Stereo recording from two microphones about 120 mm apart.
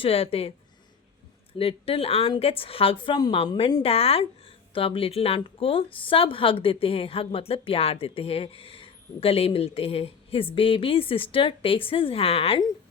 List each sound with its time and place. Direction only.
0.0 s a woman's voice: 50° left (ahead or behind)
1.5 s a woman's voice: 50° left (ahead or behind)
3.8 s a woman's voice: 55° left (ahead or behind)